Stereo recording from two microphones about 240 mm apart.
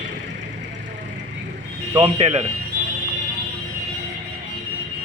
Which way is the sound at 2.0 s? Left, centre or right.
Right.